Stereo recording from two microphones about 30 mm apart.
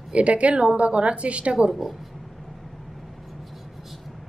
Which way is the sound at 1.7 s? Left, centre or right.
Centre.